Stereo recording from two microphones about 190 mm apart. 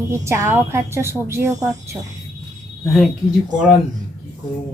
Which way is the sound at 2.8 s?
Centre (ahead or behind).